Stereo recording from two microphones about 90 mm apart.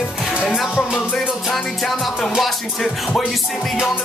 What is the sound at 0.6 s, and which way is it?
Music, centre (ahead or behind).